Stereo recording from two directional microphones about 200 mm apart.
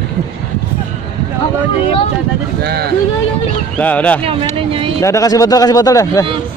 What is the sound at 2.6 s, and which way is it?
Speech, 55° right (ahead or behind).